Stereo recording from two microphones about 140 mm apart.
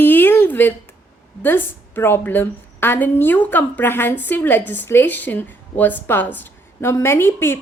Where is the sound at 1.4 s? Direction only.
15° left (ahead or behind).